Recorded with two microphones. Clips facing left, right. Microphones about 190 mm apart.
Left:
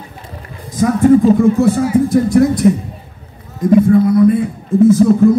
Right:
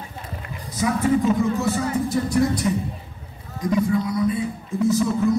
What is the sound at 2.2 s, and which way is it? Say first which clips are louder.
Speech: left 10 dB; 50° left (ahead or behind).